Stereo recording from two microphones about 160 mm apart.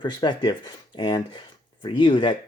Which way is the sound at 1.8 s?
30° left (ahead or behind).